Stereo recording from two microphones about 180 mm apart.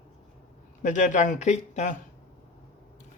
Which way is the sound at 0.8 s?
45° left (ahead or behind).